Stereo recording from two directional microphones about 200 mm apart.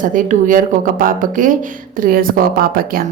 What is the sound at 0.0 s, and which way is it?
A woman's voice, 40° right (ahead or behind).